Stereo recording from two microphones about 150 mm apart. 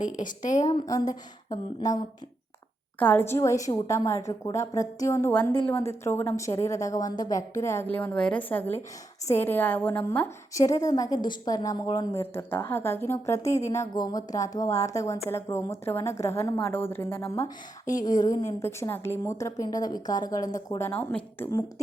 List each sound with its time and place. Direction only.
0.4 s a woman's voice: 25° left (ahead or behind)
3.0 s a woman's voice: 10° left (ahead or behind)